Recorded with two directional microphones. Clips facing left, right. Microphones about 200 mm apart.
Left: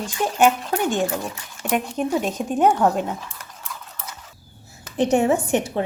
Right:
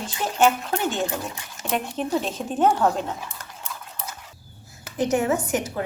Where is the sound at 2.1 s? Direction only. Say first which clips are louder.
Left 2 dB; 10° left (ahead or behind).